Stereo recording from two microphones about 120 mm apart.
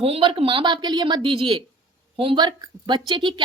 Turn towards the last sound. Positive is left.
turn(degrees=-40)  # may be behind; listen again after turning